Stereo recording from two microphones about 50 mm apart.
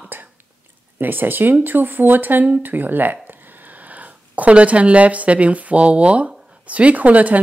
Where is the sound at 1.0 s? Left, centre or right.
Right.